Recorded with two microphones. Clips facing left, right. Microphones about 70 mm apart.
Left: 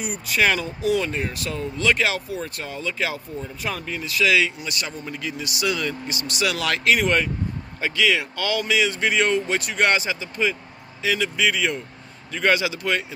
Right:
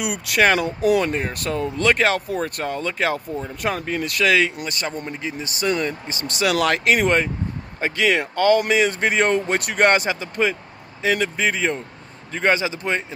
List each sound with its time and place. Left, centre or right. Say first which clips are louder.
0.0 s speech: right 3 dB; right
0.6 s speech: right 4 dB; right
1.1 s speech: right 3 dB; right